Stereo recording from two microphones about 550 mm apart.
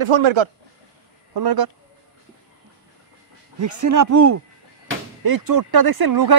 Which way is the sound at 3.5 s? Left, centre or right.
Right.